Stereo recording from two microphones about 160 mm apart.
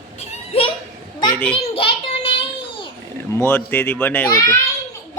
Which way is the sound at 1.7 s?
35° left (ahead or behind).